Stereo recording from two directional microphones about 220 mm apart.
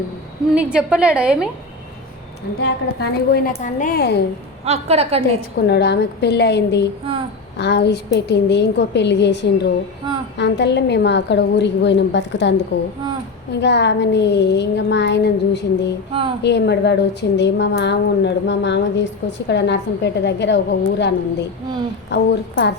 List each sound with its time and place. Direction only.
0.5 s a woman's voice: 5° right (ahead or behind)
2.6 s a woman's voice: 50° left (ahead or behind)
4.6 s a woman's voice: 30° right (ahead or behind)
5.5 s a woman's voice: 50° left (ahead or behind)